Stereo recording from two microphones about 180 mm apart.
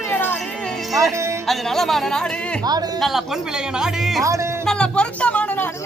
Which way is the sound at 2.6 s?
20° right (ahead or behind).